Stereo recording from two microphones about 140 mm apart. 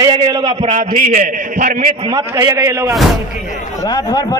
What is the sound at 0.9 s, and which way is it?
A man's voice, 75° right (ahead or behind).